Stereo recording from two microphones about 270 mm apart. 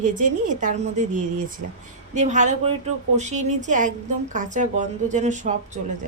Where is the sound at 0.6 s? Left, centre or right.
Right.